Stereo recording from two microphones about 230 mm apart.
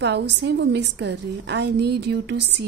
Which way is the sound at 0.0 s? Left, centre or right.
Right.